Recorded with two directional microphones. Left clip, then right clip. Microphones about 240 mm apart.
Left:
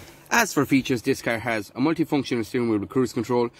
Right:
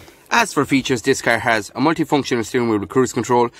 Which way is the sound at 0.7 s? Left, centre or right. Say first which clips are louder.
Right 5 dB; centre.